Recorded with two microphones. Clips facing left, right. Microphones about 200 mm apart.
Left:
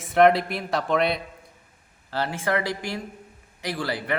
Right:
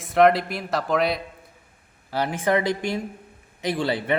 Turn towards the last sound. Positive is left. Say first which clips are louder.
# right 4 dB
turn(degrees=-25)  # may be behind; listen again after turning